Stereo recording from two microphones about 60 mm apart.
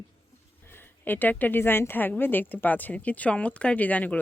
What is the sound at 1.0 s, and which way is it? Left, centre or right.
Speech, left.